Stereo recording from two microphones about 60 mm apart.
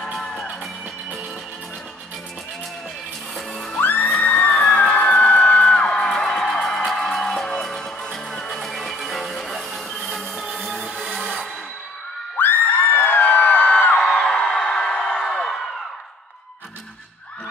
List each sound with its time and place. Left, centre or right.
0.0 s music: centre
3.8 s music: left; by 10.8 s centre
12.4 s crowd: left; by 15.1 s centre